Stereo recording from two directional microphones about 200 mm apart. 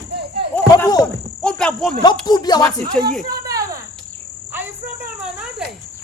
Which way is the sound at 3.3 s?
15° right (ahead or behind).